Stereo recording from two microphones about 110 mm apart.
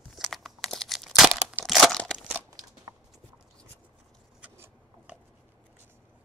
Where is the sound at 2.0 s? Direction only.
5° left (ahead or behind).